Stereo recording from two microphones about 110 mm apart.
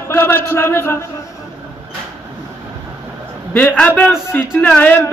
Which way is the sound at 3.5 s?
15° left (ahead or behind).